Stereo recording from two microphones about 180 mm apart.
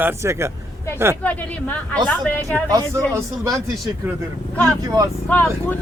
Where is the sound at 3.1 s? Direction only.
15° right (ahead or behind).